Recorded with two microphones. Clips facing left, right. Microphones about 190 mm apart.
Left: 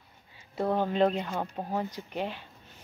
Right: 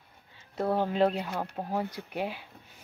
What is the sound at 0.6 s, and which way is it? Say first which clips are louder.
Speech: even; 5° right (ahead or behind).